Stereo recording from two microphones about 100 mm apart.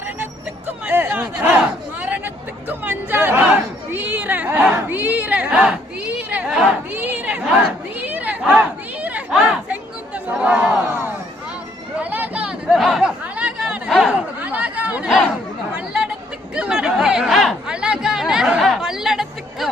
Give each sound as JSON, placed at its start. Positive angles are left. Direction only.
{"t": 0.9, "sound": "a sound", "side_deg": -20}
{"t": 9.3, "sound": "chatter", "side_deg": -10}
{"t": 10.2, "sound": "crowd", "side_deg": -10}
{"t": 12.1, "sound": "chatter", "side_deg": -15}